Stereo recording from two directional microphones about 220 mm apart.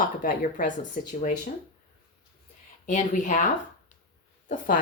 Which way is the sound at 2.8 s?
35° left (ahead or behind).